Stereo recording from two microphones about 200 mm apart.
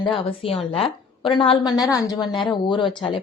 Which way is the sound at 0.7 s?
25° left (ahead or behind).